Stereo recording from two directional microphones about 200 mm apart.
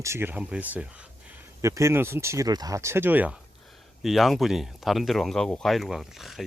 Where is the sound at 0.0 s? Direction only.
10° right (ahead or behind).